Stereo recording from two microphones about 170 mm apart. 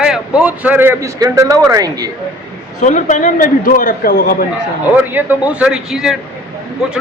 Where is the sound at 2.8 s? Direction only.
45° left (ahead or behind).